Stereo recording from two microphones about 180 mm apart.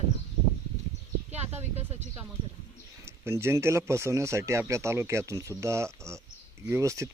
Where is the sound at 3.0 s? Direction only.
15° right (ahead or behind).